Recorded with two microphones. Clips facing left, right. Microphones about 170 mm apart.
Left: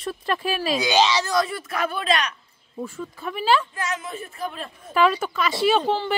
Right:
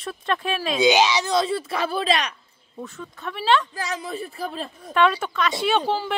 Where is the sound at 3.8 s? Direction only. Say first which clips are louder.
Right 1 dB; 35° right (ahead or behind).